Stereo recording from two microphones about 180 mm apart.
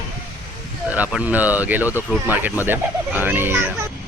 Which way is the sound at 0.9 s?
5° right (ahead or behind).